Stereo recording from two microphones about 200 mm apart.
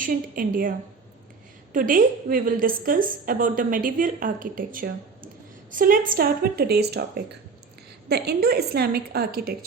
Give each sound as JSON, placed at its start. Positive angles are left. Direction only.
{"t": 0.0, "sound": "a woman's voice", "side_deg": -45}
{"t": 1.7, "sound": "a woman's voice", "side_deg": -45}